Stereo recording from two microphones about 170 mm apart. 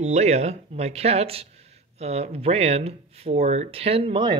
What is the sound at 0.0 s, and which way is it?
Speech, 40° right (ahead or behind).